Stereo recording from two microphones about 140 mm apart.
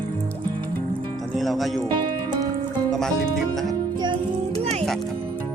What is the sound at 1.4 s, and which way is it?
Speech, centre (ahead or behind).